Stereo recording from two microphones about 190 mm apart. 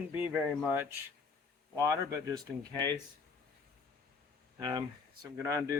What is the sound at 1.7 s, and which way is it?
Speech, 15° right (ahead or behind).